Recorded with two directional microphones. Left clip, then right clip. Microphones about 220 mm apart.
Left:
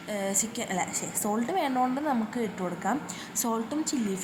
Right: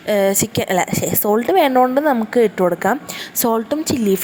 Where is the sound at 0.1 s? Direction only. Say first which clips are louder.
Right 15 dB; 40° right (ahead or behind).